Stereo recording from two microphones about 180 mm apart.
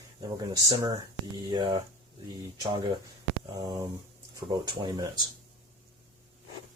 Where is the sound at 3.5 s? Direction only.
20° right (ahead or behind).